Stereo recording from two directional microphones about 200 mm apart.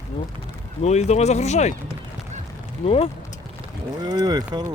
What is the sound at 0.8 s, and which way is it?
Speech, 35° left (ahead or behind).